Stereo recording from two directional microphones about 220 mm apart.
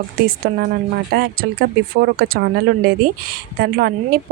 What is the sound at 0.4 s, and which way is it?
Speech, 45° right (ahead or behind).